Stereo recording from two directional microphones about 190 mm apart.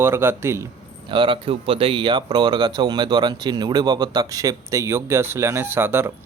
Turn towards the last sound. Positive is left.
turn(degrees=-10)  # may be behind; listen again after turning